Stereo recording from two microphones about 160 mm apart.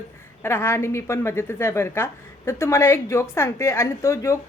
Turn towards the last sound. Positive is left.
turn(degrees=20)  # may be behind; listen again after turning